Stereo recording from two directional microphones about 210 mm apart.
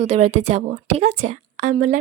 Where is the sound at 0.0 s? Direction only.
30° right (ahead or behind).